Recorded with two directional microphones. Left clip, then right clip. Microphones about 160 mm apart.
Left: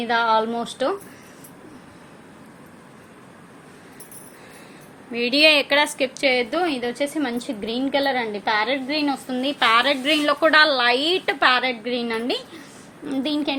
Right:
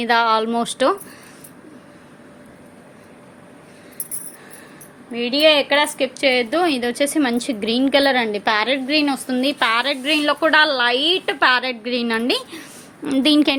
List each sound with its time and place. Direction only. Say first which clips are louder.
0.0 s speech: right 3 dB; 50° right (ahead or behind)
5.1 s a woman's voice: right 1 dB; centre (ahead or behind)
6.1 s a woman's voice: right 3 dB; 20° right (ahead or behind); by 12.6 s 35° right (ahead or behind)
13.1 s speech: right 8 dB; 45° right (ahead or behind)